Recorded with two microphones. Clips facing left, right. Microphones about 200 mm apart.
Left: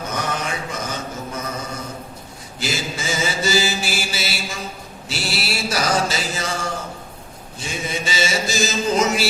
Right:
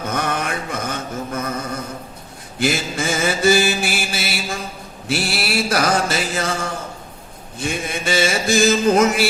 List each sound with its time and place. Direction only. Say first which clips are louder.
0.1 s mantra: right 3 dB; 55° right (ahead or behind)
2.6 s mantra: right 6 dB; 55° right (ahead or behind)
7.6 s mantra: right 3 dB; 55° right (ahead or behind)